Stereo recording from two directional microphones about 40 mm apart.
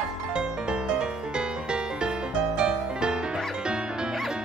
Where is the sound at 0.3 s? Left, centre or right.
Right.